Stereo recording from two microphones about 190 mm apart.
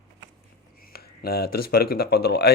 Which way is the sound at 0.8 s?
55° left (ahead or behind).